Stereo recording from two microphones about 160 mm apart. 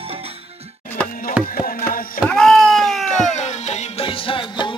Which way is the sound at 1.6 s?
65° left (ahead or behind).